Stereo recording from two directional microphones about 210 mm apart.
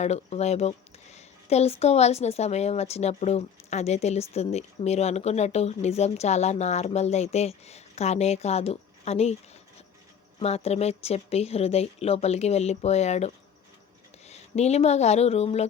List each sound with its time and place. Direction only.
0.0 s speech: 30° left (ahead or behind)
10.4 s speech: 30° left (ahead or behind)